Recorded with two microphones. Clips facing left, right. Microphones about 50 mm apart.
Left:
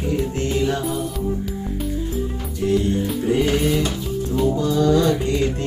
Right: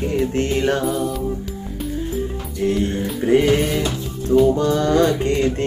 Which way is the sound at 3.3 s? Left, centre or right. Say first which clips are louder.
Right 4 dB; right.